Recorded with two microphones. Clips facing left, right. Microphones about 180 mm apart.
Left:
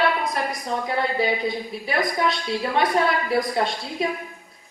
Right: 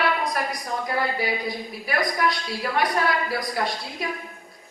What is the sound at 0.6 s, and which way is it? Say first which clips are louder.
A woman's voice: left 2 dB; 25° left (ahead or behind).